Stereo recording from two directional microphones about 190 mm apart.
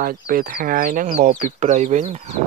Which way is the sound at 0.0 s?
50° right (ahead or behind).